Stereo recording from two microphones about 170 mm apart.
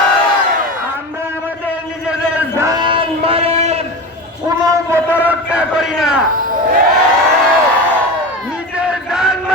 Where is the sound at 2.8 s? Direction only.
30° right (ahead or behind).